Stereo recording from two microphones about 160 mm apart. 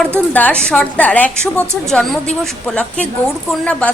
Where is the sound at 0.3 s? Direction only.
10° left (ahead or behind).